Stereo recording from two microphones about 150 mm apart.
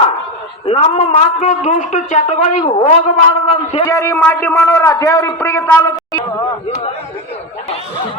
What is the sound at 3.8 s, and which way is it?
A man's voice, 20° left (ahead or behind).